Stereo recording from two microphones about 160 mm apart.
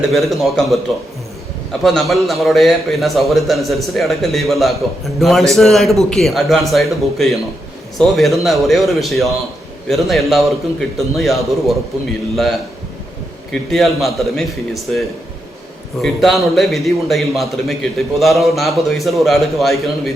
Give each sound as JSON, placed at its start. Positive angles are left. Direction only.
{"t": 0.1, "sound": "a man's voice", "side_deg": 0}
{"t": 1.8, "sound": "a man's voice", "side_deg": 0}
{"t": 13.5, "sound": "a man's voice", "side_deg": 0}